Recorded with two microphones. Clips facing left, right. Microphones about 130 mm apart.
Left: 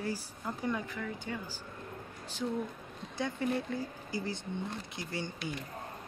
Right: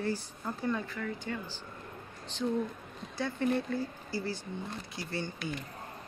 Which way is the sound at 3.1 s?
15° left (ahead or behind).